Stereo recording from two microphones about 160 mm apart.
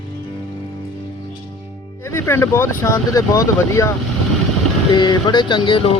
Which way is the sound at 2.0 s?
15° left (ahead or behind).